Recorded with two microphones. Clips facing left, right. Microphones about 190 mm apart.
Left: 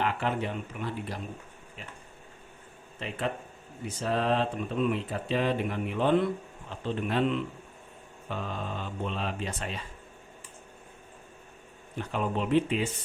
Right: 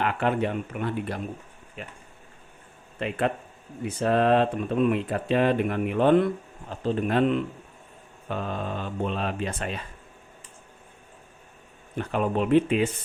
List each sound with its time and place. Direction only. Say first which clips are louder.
0.0 s speech: right 5 dB; 60° right (ahead or behind)
3.0 s speech: right 6 dB; 60° right (ahead or behind)
6.7 s speech: right 6 dB; 40° right (ahead or behind)
11.9 s speech: right 5 dB; 55° right (ahead or behind)